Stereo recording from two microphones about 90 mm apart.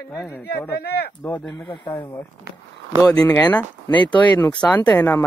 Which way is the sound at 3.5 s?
15° left (ahead or behind).